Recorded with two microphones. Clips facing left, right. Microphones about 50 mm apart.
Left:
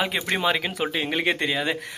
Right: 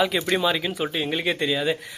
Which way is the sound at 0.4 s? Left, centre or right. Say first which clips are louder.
Even; left.